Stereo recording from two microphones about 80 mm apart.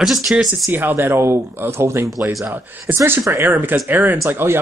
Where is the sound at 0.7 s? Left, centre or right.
Right.